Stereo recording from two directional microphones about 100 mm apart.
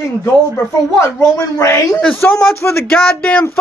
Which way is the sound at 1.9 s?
5° left (ahead or behind).